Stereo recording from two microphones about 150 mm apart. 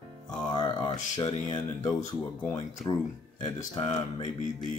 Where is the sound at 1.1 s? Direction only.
25° left (ahead or behind).